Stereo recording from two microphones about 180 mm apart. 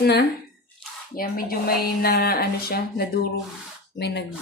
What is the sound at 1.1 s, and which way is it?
Speech, 55° left (ahead or behind).